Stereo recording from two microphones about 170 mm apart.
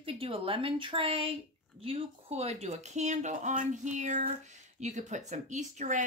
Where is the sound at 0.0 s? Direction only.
35° right (ahead or behind).